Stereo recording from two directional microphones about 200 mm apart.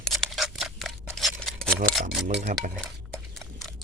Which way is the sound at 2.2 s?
Centre (ahead or behind).